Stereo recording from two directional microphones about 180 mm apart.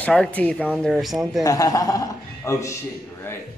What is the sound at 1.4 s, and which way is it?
A man's voice, 20° left (ahead or behind).